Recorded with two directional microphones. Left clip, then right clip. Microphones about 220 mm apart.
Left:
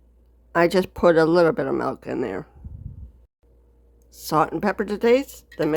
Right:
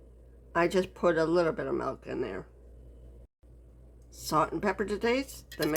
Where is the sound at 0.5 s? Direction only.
40° left (ahead or behind).